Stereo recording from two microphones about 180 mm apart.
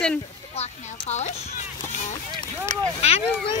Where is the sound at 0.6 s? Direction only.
40° left (ahead or behind).